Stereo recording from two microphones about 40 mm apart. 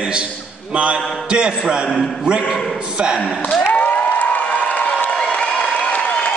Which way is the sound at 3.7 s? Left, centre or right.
Left.